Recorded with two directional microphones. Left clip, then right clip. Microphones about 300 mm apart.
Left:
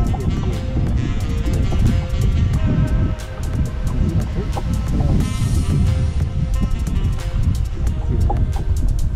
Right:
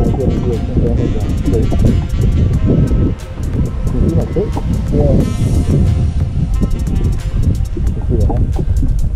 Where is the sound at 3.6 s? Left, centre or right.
Centre.